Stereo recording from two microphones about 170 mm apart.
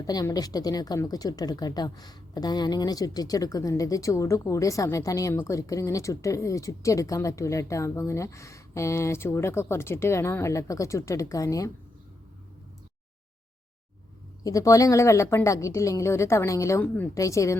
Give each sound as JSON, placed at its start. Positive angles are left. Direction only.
{"t": 0.1, "sound": "a woman's voice", "side_deg": 25}
{"t": 14.4, "sound": "a woman's voice", "side_deg": 20}